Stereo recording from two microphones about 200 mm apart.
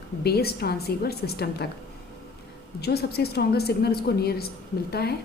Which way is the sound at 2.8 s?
50° left (ahead or behind).